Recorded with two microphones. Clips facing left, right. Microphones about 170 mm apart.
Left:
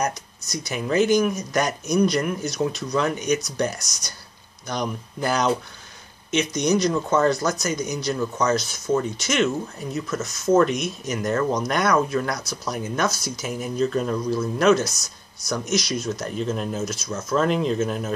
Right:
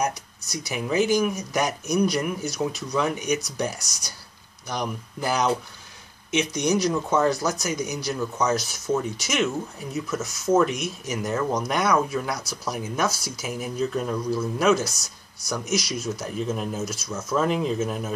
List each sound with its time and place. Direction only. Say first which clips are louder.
0.0 s speech: left 1 dB; 10° right (ahead or behind)